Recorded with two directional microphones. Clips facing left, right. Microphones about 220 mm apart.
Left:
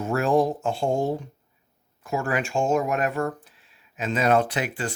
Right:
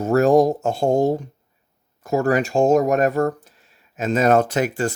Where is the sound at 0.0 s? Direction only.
40° right (ahead or behind).